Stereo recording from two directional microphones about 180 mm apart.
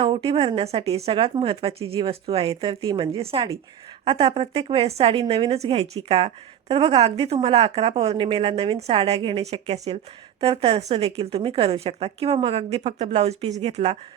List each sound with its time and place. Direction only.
0.0 s a woman's voice: 30° right (ahead or behind)